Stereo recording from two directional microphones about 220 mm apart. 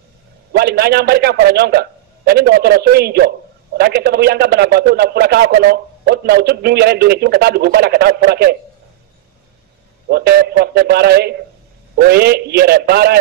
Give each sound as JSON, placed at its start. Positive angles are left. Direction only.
{"t": 0.5, "sound": "a man's voice", "side_deg": -45}
{"t": 10.0, "sound": "a man's voice", "side_deg": -45}